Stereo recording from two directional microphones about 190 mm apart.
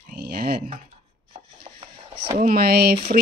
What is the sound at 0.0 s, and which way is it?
Typing, 55° right (ahead or behind).